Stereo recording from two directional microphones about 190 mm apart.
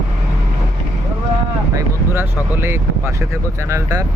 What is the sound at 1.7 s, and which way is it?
Speech, 15° right (ahead or behind).